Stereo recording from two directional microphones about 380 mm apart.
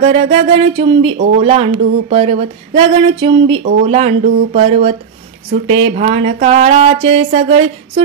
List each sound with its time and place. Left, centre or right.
0.0 s speech: centre